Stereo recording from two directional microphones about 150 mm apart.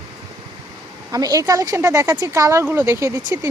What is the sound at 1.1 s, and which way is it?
Speech, 25° right (ahead or behind).